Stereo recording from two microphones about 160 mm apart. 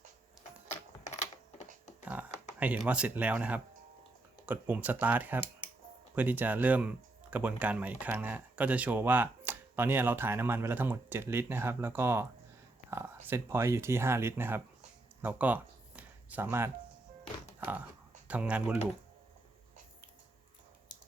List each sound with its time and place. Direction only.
0.7 s typing: 45° left (ahead or behind)
2.6 s speech: 10° right (ahead or behind)
15.2 s a sound: 10° right (ahead or behind)
17.6 s speech: 10° right (ahead or behind)